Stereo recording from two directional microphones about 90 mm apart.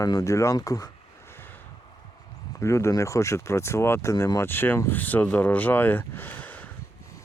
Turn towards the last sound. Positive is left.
turn(degrees=20)  # may be behind; listen again after turning